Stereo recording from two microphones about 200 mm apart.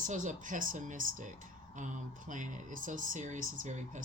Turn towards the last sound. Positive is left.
turn(degrees=-35)  # may be behind; listen again after turning